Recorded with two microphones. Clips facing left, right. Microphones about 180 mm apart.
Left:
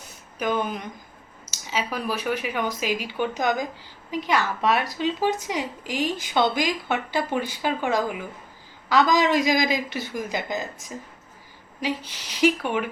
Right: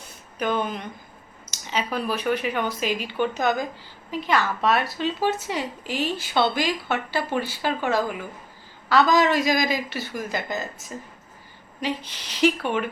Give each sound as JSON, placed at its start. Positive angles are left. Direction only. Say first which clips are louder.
{"t": 0.3, "sound": "a woman's voice", "louder": "even", "side_deg": 10}